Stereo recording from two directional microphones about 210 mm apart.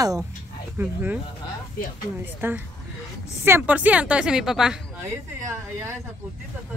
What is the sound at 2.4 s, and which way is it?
A woman's voice, 10° right (ahead or behind).